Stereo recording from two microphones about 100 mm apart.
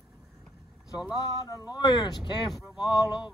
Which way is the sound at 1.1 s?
35° left (ahead or behind).